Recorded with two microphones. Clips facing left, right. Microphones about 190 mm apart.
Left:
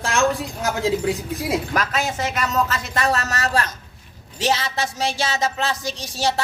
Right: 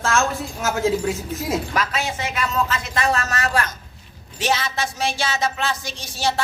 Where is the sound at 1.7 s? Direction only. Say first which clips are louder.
Left 1 dB; 40° left (ahead or behind).